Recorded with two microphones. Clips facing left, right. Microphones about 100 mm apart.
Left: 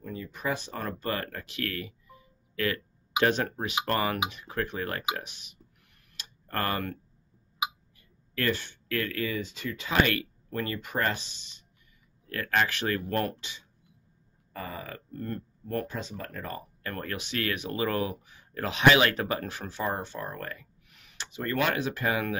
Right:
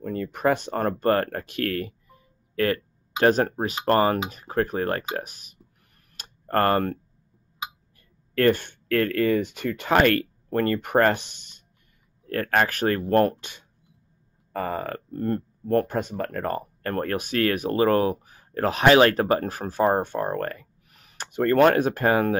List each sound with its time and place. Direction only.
0.0 s speech: 55° right (ahead or behind)
6.1 s tick-tock: 50° right (ahead or behind)
7.6 s hiccup: 10° left (ahead or behind)
8.4 s speech: 55° right (ahead or behind)